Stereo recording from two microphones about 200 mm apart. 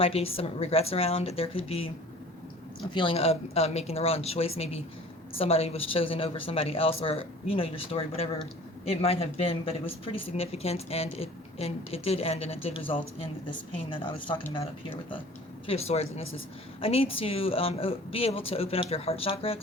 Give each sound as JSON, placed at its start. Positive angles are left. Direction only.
{"t": 0.0, "sound": "speech", "side_deg": 30}
{"t": 2.9, "sound": "a woman's voice", "side_deg": 25}